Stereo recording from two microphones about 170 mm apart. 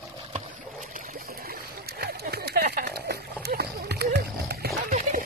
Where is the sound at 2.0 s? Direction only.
70° right (ahead or behind).